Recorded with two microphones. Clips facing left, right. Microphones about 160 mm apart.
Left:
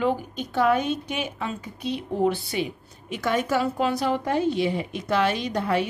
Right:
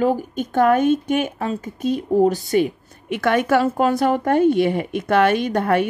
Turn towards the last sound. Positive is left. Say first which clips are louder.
# right 6 dB
turn(degrees=-55)  # may be behind; listen again after turning